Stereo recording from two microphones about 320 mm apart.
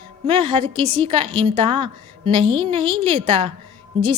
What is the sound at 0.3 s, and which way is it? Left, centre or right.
A woman's voice, centre.